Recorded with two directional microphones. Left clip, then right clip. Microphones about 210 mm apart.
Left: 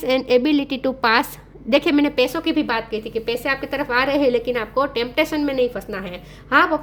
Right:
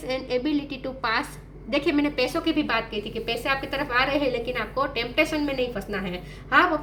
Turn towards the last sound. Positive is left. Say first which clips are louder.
# left 4 dB
turn(degrees=50)  # may be behind; listen again after turning